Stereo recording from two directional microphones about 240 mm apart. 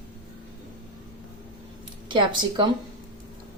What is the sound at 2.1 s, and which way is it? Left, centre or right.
Speech, centre.